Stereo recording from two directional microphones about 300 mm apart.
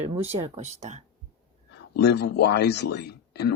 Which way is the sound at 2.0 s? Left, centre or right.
Left.